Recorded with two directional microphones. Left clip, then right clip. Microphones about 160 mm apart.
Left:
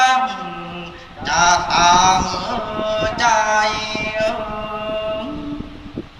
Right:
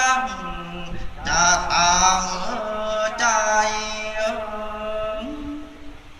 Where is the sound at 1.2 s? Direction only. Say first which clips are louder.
Left 4 dB; 45° right (ahead or behind).